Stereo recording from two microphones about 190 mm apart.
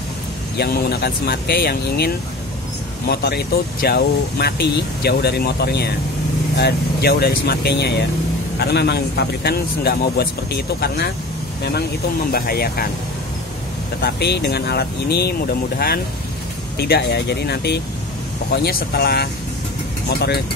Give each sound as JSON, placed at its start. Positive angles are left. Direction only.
{"t": 0.6, "sound": "speech", "side_deg": 60}
{"t": 12.3, "sound": "speech", "side_deg": 55}
{"t": 14.0, "sound": "speech", "side_deg": 60}
{"t": 16.7, "sound": "speech", "side_deg": 55}